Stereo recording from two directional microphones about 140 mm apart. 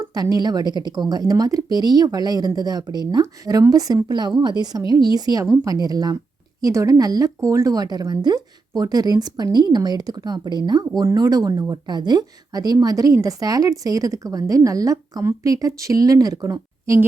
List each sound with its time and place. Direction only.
0.0 s speech: 25° right (ahead or behind)